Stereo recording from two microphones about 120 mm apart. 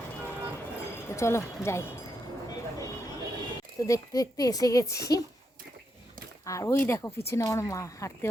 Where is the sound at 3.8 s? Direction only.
30° left (ahead or behind).